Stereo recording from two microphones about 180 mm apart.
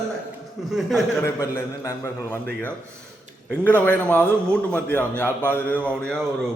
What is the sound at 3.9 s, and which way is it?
A man's voice, 5° left (ahead or behind).